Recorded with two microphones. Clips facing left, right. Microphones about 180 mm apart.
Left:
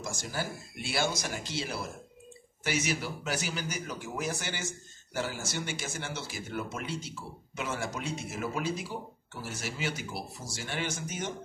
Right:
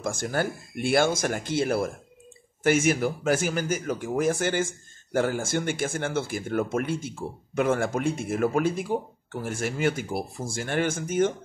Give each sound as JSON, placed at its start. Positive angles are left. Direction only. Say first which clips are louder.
{"t": 0.0, "sound": "speech", "louder": "right 9 dB", "side_deg": -55}